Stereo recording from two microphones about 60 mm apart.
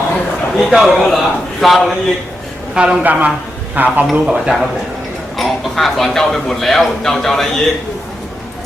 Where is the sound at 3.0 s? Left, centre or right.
Right.